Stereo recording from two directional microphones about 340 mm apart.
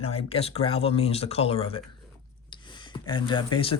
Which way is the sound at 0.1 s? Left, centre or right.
Centre.